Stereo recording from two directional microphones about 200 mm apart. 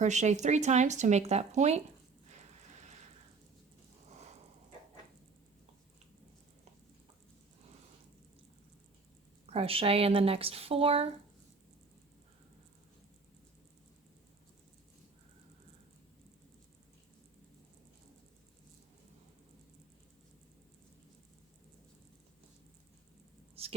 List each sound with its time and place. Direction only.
0.0 s speech: 35° right (ahead or behind)
9.5 s speech: 30° right (ahead or behind)